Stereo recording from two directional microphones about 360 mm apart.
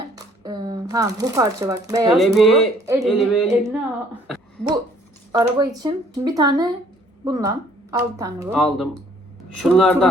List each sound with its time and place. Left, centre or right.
0.2 s a woman's voice: centre